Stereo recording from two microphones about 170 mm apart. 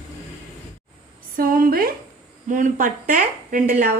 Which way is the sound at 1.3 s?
55° right (ahead or behind).